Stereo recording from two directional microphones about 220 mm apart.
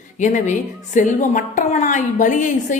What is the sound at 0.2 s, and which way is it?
A woman's voice, 35° left (ahead or behind).